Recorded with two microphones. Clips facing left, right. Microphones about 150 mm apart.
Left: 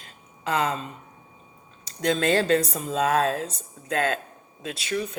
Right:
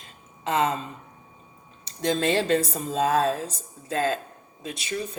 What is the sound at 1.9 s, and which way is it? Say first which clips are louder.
Speech: left 1 dB; 25° right (ahead or behind).